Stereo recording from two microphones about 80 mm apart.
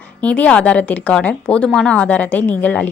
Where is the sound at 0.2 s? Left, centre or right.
Centre.